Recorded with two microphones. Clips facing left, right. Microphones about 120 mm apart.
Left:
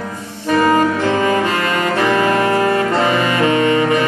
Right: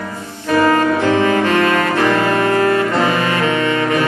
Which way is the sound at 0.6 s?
15° left (ahead or behind).